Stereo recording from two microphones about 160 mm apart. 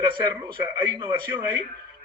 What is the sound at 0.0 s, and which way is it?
Speech, 25° right (ahead or behind).